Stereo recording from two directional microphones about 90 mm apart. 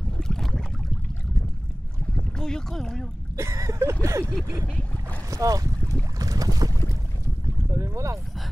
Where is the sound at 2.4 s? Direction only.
5° left (ahead or behind).